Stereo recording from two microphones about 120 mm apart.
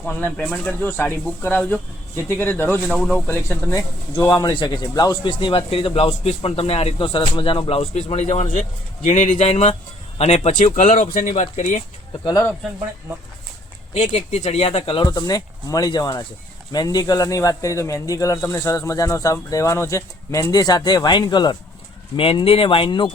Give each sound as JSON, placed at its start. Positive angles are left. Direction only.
{"t": 0.0, "sound": "speech", "side_deg": 15}
{"t": 2.9, "sound": "speech", "side_deg": 5}
{"t": 3.2, "sound": "a man's voice", "side_deg": 20}
{"t": 8.1, "sound": "a man's voice", "side_deg": 65}
{"t": 9.0, "sound": "a man's voice", "side_deg": 85}
{"t": 12.2, "sound": "speech", "side_deg": 30}
{"t": 13.9, "sound": "speech", "side_deg": 60}
{"t": 15.0, "sound": "a man's voice", "side_deg": 35}